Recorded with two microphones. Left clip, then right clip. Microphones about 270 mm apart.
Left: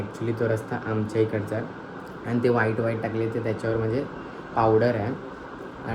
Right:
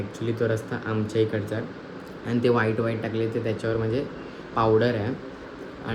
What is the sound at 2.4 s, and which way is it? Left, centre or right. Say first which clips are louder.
Speech: even; centre.